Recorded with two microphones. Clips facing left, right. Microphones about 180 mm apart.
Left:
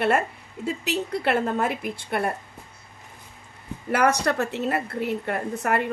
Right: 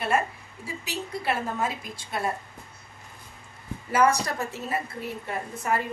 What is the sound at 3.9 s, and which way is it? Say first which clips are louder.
A woman's voice: left 1 dB; 65° left (ahead or behind).